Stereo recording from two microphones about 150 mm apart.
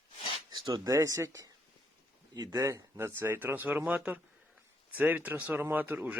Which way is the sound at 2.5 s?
20° right (ahead or behind).